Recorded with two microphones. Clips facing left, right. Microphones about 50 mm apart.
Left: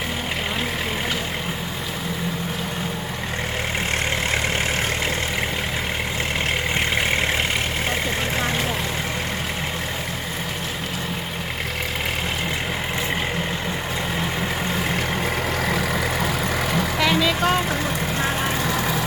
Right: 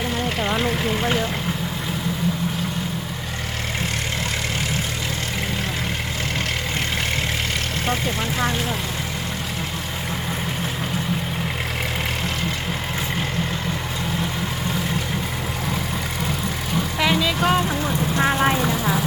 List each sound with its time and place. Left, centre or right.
17.0 s music: centre
18.2 s vehicle: right